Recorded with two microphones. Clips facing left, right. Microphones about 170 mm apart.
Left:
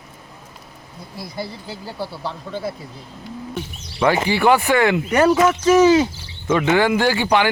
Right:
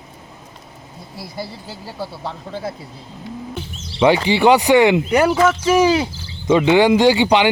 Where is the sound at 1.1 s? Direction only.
20° left (ahead or behind).